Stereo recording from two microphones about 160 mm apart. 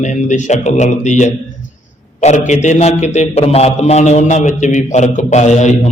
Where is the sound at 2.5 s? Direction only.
45° left (ahead or behind).